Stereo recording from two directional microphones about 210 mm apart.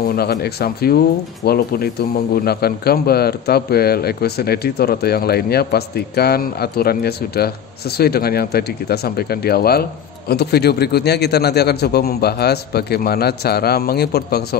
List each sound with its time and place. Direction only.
0.1 s speech: 50° left (ahead or behind)